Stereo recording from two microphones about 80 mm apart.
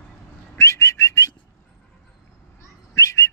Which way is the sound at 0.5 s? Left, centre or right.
Left.